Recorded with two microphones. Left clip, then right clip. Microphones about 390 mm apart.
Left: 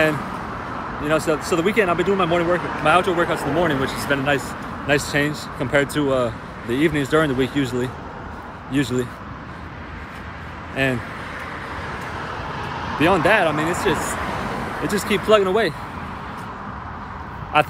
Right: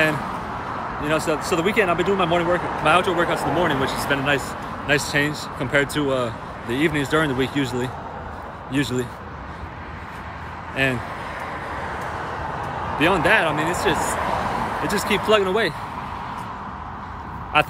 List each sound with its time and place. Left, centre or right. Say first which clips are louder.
1.0 s speech: left 2 dB; centre
10.8 s speech: even; centre
11.8 s vehicle: right 1 dB; right
13.0 s speech: left 1 dB; centre
13.9 s a sound: right 2 dB; right
14.9 s speech: left 2 dB; centre
17.5 s speech: left 1 dB; centre